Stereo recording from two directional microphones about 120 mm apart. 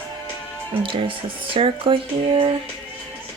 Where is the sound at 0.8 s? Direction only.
45° right (ahead or behind).